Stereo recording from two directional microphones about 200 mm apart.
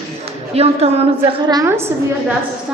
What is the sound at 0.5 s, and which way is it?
Speech, 30° right (ahead or behind).